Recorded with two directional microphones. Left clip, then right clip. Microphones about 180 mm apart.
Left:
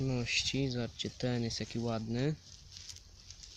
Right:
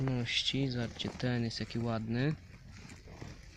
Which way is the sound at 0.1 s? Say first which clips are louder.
Right 1 dB; 15° left (ahead or behind).